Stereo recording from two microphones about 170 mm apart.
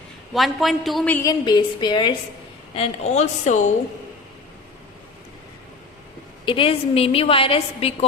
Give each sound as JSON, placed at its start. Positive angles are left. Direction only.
{"t": 0.3, "sound": "a woman's voice", "side_deg": 0}
{"t": 1.3, "sound": "a woman's voice", "side_deg": 25}
{"t": 2.7, "sound": "a woman's voice", "side_deg": 35}
{"t": 6.4, "sound": "a woman's voice", "side_deg": 30}